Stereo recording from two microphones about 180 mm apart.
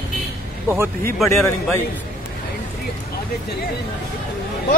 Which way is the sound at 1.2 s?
15° left (ahead or behind).